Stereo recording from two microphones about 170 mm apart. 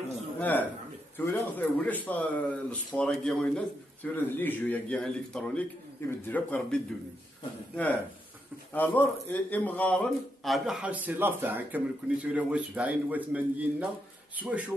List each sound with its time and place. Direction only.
0.4 s a man's voice: 10° left (ahead or behind)
8.7 s a man's voice: 10° left (ahead or behind); by 14.6 s 5° right (ahead or behind)